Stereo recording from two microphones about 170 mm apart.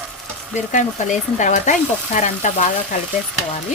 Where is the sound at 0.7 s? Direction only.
45° left (ahead or behind).